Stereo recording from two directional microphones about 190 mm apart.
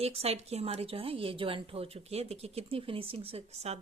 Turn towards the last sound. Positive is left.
turn(degrees=-35)  # may be behind; listen again after turning